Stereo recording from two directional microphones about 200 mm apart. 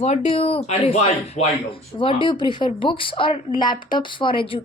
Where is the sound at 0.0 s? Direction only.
30° left (ahead or behind).